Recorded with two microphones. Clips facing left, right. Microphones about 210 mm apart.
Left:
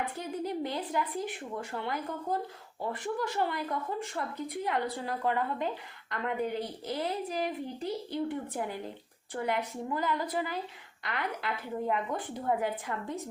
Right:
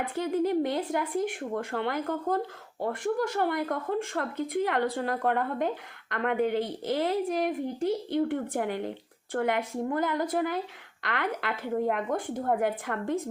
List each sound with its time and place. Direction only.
0.2 s a woman's voice: 65° right (ahead or behind)
2.8 s a woman's voice: 50° right (ahead or behind)
4.1 s a woman's voice: 80° right
4.9 s a woman's voice: 55° right (ahead or behind); by 7.2 s 80° right
7.3 s a woman's voice: 55° right (ahead or behind); by 8.9 s 70° right (ahead or behind)
9.3 s a woman's voice: 55° right (ahead or behind)
11.0 s a woman's voice: 75° right (ahead or behind)
12.0 s a woman's voice: 45° right (ahead or behind)